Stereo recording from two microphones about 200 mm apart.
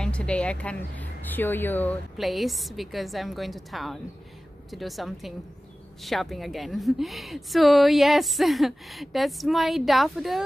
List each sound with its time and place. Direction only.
0.0 s speech: 5° left (ahead or behind)